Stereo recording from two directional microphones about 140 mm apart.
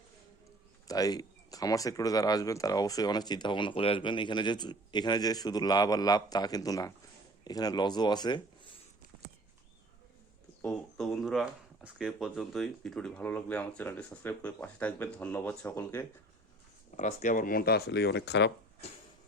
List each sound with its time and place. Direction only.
0.9 s speech: 25° left (ahead or behind)
10.6 s speech: 5° left (ahead or behind)
17.2 s speech: 75° left (ahead or behind)